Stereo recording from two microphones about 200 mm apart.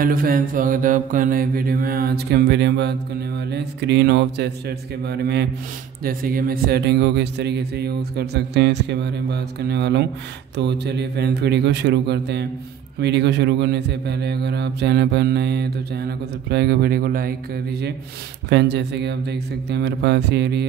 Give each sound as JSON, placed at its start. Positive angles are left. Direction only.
{"t": 0.0, "sound": "mantra", "side_deg": -45}
{"t": 3.4, "sound": "speech", "side_deg": -60}